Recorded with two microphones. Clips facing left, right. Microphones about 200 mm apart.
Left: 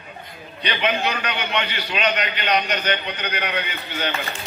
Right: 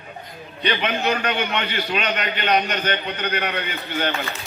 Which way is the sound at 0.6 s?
50° right (ahead or behind).